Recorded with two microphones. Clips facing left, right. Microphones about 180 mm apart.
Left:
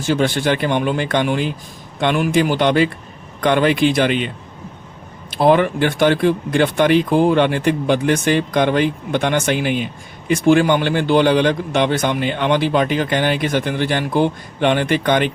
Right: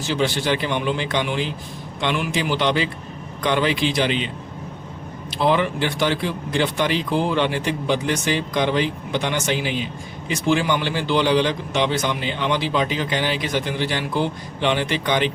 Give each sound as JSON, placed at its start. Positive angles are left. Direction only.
{"t": 0.0, "sound": "speech", "side_deg": 50}
{"t": 5.4, "sound": "speech", "side_deg": 50}